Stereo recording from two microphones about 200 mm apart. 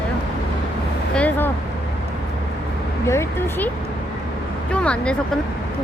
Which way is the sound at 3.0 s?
15° left (ahead or behind).